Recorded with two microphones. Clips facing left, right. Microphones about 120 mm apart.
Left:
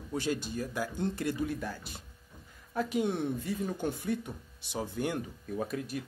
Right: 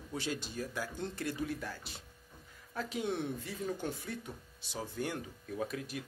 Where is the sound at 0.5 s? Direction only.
5° left (ahead or behind).